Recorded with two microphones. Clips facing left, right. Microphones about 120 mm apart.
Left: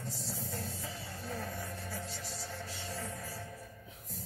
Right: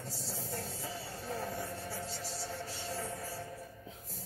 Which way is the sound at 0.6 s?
30° right (ahead or behind).